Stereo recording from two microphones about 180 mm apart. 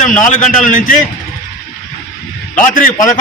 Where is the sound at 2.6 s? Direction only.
45° left (ahead or behind).